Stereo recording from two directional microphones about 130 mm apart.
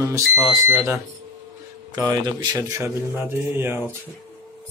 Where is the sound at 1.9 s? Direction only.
30° right (ahead or behind).